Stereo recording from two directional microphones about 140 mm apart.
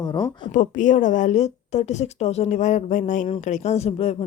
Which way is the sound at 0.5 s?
65° left (ahead or behind).